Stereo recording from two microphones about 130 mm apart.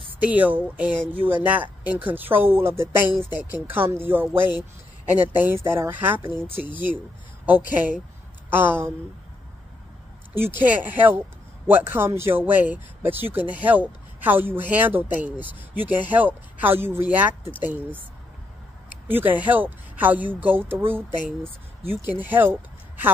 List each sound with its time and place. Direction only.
0.2 s speech: 10° right (ahead or behind)
10.3 s speech: 15° right (ahead or behind)
19.0 s speech: 15° right (ahead or behind)